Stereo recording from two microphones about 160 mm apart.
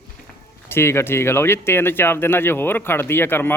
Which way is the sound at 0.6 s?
15° left (ahead or behind).